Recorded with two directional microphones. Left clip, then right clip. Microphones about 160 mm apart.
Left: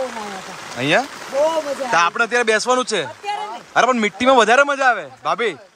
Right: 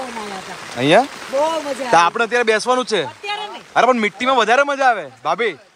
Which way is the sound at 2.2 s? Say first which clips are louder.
Right 1 dB; 15° left (ahead or behind).